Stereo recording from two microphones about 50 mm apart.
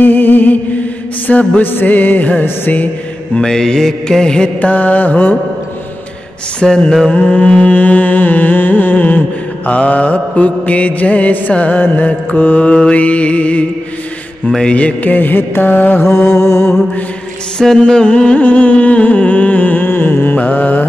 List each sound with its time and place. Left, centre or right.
0.0 s mantra: left
1.6 s music: left
3.3 s mantra: centre
4.6 s music: left
6.6 s mantra: centre
7.1 s music: left
9.7 s mantra: left
15.1 s music: left
16.1 s mantra: left
17.7 s mantra: centre
19.8 s a sound: left
20.3 s music: left